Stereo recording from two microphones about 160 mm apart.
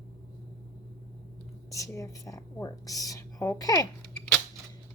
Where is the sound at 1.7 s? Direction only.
20° left (ahead or behind).